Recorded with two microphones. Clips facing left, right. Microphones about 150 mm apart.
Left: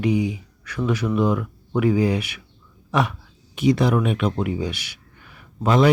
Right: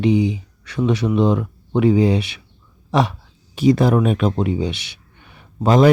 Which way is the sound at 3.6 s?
40° right (ahead or behind).